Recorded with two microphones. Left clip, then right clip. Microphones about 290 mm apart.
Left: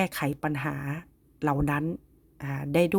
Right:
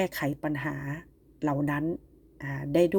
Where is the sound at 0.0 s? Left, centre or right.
Left.